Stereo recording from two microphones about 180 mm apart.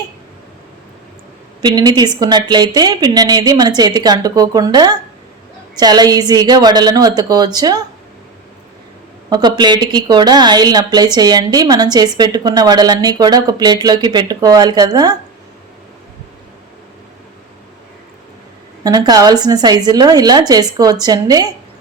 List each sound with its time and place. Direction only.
1.6 s speech: 25° right (ahead or behind)
9.3 s speech: 25° right (ahead or behind)
18.8 s speech: 20° right (ahead or behind)